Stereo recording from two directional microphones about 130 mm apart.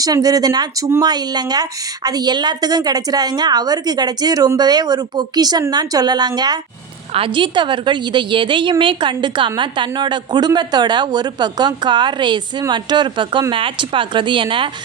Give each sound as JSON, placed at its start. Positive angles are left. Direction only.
{"t": 0.0, "sound": "a woman's voice", "side_deg": -30}